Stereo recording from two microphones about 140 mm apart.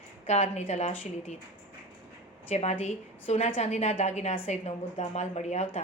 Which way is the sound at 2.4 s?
50° left (ahead or behind).